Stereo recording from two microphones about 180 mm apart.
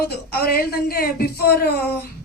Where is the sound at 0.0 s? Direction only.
60° left (ahead or behind).